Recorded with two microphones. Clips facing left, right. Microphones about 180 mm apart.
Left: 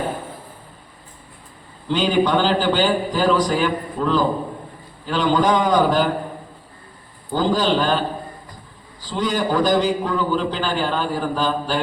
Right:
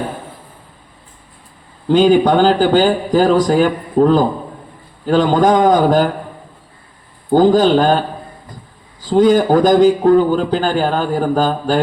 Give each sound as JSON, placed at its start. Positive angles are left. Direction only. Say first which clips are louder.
{"t": 1.9, "sound": "a man's voice", "louder": "right 7 dB", "side_deg": -45}
{"t": 7.3, "sound": "a man's voice", "louder": "right 9 dB", "side_deg": -50}
{"t": 9.0, "sound": "a man's voice", "louder": "right 11 dB", "side_deg": -50}